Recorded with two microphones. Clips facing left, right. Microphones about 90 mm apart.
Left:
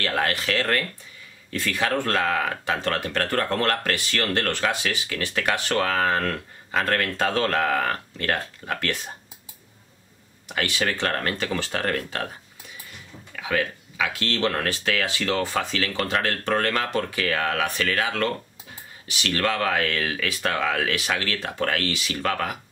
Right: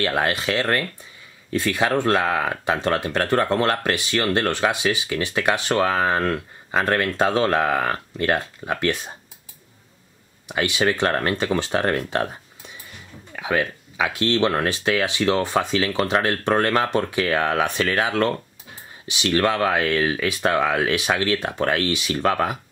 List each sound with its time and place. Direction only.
0.0 s speech: 25° right (ahead or behind)
10.5 s speech: 20° right (ahead or behind)
13.4 s speech: 25° right (ahead or behind)